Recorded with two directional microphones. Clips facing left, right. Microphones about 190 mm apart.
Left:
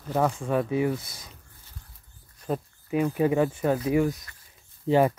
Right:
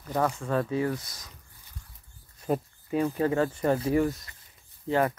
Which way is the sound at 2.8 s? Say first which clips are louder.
Left 2 dB; 5° left (ahead or behind).